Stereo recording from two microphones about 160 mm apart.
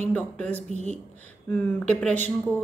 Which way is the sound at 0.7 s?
45° right (ahead or behind).